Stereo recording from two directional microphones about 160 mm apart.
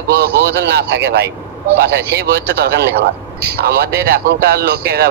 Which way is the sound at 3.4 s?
75° right (ahead or behind).